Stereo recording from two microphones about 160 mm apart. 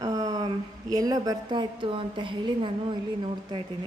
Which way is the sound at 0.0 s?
20° right (ahead or behind).